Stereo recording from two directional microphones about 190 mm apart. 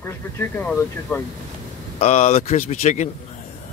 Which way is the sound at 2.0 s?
35° left (ahead or behind).